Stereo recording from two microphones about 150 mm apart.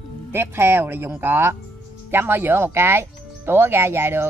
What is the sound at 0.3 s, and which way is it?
Speech, 15° right (ahead or behind).